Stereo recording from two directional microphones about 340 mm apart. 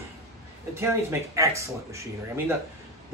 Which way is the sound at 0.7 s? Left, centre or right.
Centre.